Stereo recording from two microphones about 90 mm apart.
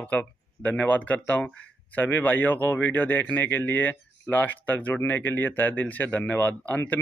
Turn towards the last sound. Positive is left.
turn(degrees=15)  # may be behind; listen again after turning